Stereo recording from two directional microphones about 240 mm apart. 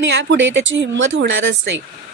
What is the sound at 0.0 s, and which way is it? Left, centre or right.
Speech, right.